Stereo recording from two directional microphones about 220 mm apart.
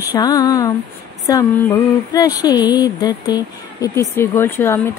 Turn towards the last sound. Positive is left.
turn(degrees=10)  # may be behind; listen again after turning